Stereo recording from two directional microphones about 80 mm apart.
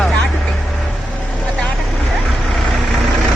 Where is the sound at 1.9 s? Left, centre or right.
Centre.